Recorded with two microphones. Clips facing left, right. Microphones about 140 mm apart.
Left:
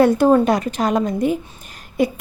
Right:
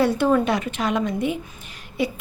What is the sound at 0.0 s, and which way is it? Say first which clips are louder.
A woman's voice: left 6 dB; 40° left (ahead or behind).